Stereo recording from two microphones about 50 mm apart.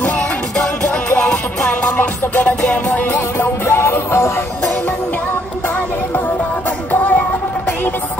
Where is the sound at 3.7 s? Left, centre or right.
Left.